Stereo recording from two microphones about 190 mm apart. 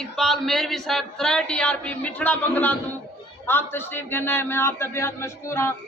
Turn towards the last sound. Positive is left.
turn(degrees=15)  # may be behind; listen again after turning